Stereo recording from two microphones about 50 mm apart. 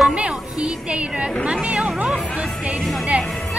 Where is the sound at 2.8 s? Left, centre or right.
Centre.